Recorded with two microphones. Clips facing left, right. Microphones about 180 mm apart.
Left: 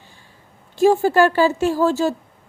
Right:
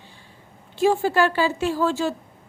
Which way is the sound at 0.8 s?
45° left (ahead or behind).